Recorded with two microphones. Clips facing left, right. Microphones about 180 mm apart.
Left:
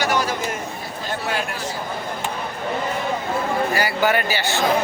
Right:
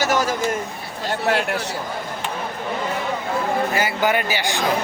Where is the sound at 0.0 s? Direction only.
40° right (ahead or behind).